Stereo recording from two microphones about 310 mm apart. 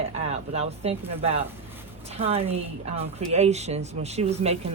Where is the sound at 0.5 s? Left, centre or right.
Centre.